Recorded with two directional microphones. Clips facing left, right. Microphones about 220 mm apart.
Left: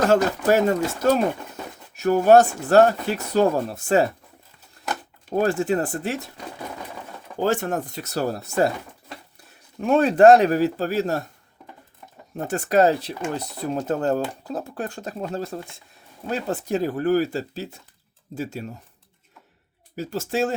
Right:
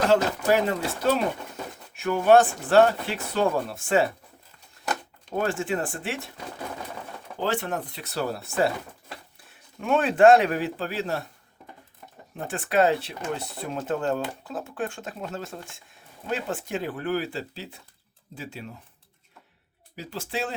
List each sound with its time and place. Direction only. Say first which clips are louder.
0.1 s speech: left 3 dB; 45° left (ahead or behind)
5.3 s speech: left 6 dB; 40° left (ahead or behind)
7.3 s speech: left 5 dB; 45° left (ahead or behind)
9.8 s speech: left 4 dB; 40° left (ahead or behind)
12.4 s speech: left 4 dB; 40° left (ahead or behind)
20.0 s speech: left 7 dB; 45° left (ahead or behind)